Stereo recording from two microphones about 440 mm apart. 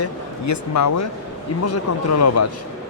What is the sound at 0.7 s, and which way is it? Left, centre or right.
Speech, left.